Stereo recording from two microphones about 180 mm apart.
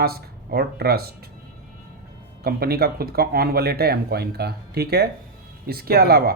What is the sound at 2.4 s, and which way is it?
Speech, 60° right (ahead or behind).